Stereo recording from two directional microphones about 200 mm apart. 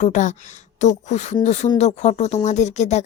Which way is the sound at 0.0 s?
40° left (ahead or behind).